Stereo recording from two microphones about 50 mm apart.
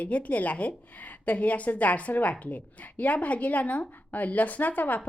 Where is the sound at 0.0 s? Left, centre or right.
Left.